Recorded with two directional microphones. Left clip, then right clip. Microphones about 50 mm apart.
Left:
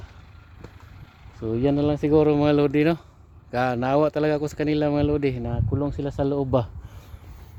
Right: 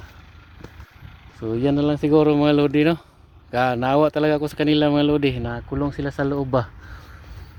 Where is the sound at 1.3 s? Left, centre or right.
Left.